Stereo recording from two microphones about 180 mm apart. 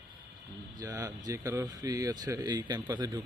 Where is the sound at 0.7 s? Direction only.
20° right (ahead or behind).